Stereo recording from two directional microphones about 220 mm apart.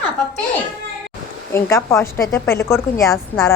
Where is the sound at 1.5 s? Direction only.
15° left (ahead or behind).